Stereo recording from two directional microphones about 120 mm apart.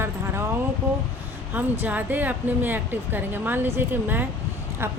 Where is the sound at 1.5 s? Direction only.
15° right (ahead or behind).